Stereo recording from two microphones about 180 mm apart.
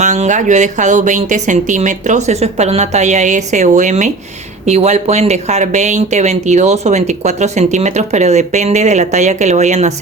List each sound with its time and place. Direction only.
0.0 s speech: 40° right (ahead or behind)